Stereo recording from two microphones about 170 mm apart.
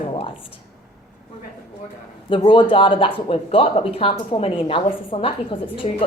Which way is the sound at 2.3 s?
30° left (ahead or behind).